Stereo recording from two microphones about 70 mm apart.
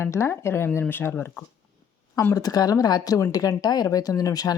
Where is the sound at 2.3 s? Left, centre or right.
Left.